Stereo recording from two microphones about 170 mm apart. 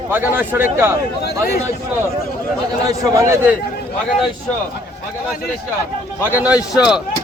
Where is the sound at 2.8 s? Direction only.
15° right (ahead or behind).